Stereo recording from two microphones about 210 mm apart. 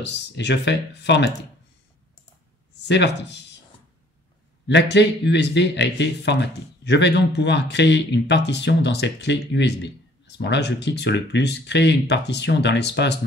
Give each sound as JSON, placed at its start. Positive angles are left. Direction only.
{"t": 0.0, "sound": "speech", "side_deg": 55}
{"t": 2.9, "sound": "speech", "side_deg": 55}
{"t": 4.6, "sound": "speech", "side_deg": 55}